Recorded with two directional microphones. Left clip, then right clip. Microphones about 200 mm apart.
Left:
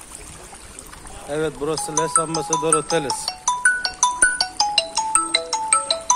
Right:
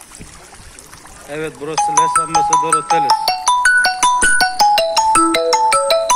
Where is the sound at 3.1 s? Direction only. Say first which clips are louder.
Right 10 dB; 45° right (ahead or behind).